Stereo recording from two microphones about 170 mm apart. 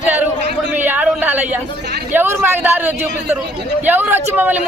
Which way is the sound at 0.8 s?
10° right (ahead or behind).